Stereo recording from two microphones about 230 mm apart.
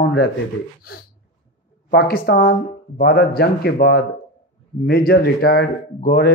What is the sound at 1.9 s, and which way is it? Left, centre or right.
Speech, left.